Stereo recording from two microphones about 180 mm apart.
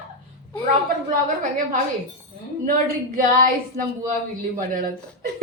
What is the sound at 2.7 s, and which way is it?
Speech, 50° right (ahead or behind).